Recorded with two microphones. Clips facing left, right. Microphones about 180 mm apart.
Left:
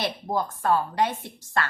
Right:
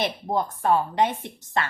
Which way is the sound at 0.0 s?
20° right (ahead or behind).